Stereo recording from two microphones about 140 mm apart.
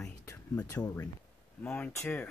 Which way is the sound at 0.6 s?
25° left (ahead or behind).